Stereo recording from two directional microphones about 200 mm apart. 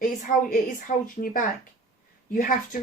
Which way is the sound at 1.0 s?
45° left (ahead or behind).